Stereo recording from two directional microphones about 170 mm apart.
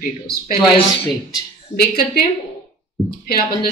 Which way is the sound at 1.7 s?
60° left (ahead or behind).